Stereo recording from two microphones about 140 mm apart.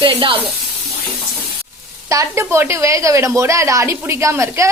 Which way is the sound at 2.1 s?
20° right (ahead or behind).